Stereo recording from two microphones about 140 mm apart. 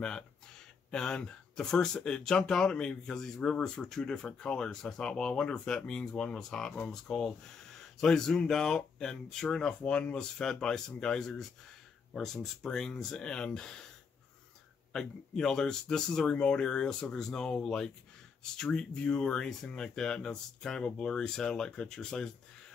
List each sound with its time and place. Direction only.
0.9 s speech: 5° left (ahead or behind)
14.9 s speech: 5° left (ahead or behind)